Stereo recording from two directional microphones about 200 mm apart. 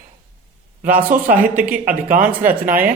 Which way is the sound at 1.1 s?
40° right (ahead or behind).